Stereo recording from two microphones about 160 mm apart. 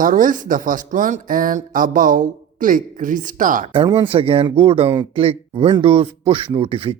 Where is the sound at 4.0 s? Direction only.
35° right (ahead or behind).